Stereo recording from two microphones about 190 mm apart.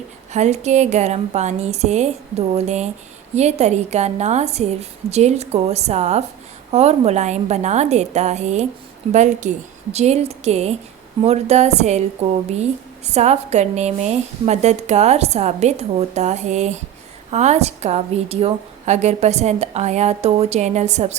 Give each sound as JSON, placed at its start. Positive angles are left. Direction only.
{"t": 0.3, "sound": "a woman's voice", "side_deg": -35}
{"t": 13.1, "sound": "a woman's voice", "side_deg": -35}